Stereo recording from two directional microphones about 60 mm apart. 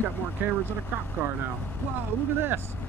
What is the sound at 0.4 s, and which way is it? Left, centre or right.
Speech, right.